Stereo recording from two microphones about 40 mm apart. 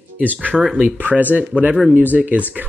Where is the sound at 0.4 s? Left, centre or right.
Right.